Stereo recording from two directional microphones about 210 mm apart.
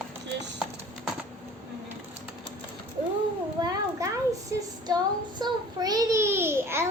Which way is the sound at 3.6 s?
20° right (ahead or behind).